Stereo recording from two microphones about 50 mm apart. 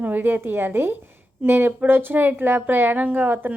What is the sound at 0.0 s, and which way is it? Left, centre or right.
A woman's voice, right.